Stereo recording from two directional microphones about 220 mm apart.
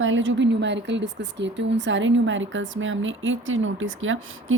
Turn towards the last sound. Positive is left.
turn(degrees=-65)  # may be behind; listen again after turning